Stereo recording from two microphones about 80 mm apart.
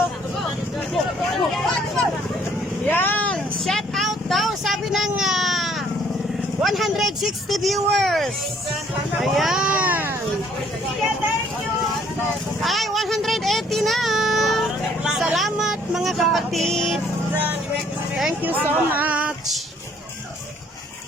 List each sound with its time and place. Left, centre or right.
1.3 s vehicle: centre
2.9 s vehicle: left
3.3 s vehicle: centre
6.6 s speech: centre
9.2 s a sound: centre; by 10.2 s right
12.6 s a sound: centre
18.4 s speech: right